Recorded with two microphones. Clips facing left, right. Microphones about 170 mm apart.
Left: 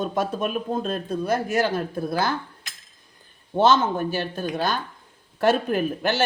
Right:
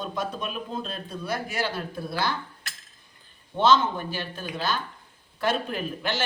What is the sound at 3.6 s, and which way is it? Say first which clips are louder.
Speech: left 2 dB; 45° left (ahead or behind).